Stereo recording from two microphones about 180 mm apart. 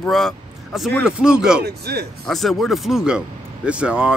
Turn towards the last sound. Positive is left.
turn(degrees=-5)  # may be behind; listen again after turning